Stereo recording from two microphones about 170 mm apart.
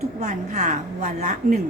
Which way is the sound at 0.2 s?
45° right (ahead or behind).